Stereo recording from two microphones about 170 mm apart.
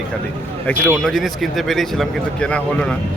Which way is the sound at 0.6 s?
5° left (ahead or behind).